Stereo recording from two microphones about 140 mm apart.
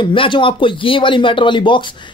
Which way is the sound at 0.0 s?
35° left (ahead or behind).